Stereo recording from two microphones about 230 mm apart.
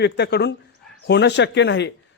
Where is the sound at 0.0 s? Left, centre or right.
Left.